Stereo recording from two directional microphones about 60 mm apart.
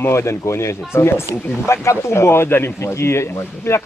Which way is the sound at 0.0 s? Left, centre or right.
Left.